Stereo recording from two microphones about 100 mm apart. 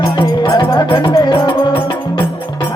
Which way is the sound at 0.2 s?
50° left (ahead or behind).